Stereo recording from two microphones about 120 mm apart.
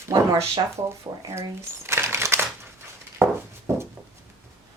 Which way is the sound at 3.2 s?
20° right (ahead or behind).